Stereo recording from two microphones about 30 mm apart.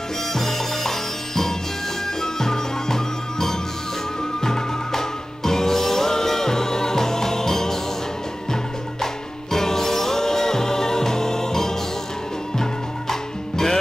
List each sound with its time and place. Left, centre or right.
0.3 s music: centre
9.0 s music: centre
13.1 s music: centre